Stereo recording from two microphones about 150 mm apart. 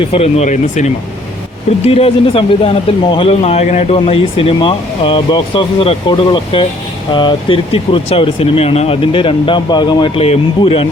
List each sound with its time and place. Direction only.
0.0 s speech: 40° left (ahead or behind)